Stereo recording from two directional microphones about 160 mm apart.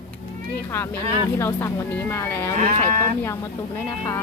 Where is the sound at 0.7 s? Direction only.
15° left (ahead or behind).